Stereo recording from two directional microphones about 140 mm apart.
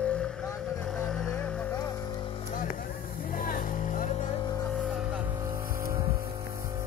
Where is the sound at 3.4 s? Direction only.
70° left (ahead or behind).